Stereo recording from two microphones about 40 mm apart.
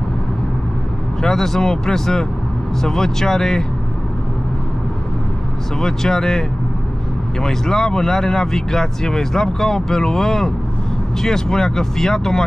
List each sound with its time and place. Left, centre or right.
1.2 s speech: centre
5.8 s speech: centre
7.4 s speech: centre